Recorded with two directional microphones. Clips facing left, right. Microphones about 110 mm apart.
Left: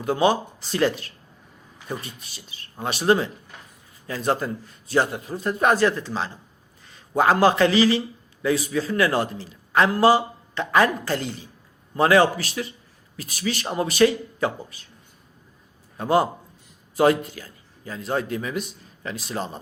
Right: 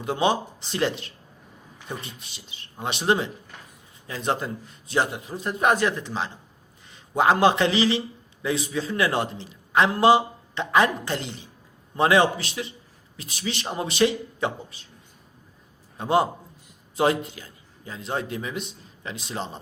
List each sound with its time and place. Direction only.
0.0 s a man's voice: 20° right (ahead or behind)
16.0 s a man's voice: 25° right (ahead or behind)